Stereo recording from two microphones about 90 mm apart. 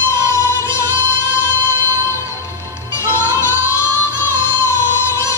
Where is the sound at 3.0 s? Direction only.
30° left (ahead or behind).